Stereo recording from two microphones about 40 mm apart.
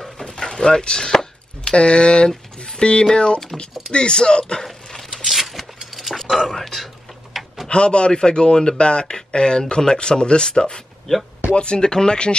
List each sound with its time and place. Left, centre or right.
0.2 s a sound: centre
3.5 s speech: centre
3.9 s speech: left
5.1 s a sound: centre
6.5 s speech: centre
7.6 s speech: left